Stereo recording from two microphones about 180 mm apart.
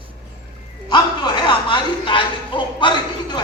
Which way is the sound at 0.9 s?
25° left (ahead or behind).